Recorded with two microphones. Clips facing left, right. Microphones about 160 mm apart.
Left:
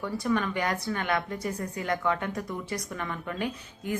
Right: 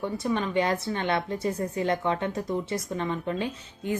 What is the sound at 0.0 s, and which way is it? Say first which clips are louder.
Speech: even; 25° right (ahead or behind).